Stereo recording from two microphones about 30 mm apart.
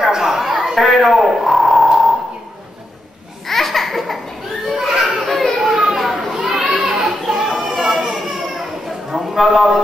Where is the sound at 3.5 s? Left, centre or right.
Centre.